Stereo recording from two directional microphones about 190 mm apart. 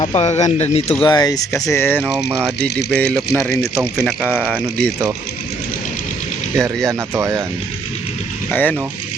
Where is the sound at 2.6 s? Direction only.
65° left (ahead or behind).